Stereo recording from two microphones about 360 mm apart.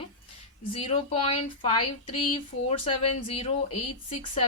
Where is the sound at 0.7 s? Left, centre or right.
Centre.